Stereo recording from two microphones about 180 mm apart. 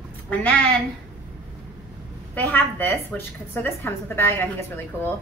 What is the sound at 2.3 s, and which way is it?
A woman's voice, 10° left (ahead or behind).